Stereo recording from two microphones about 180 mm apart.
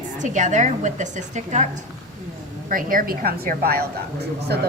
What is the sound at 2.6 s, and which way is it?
A woman's voice, 50° right (ahead or behind).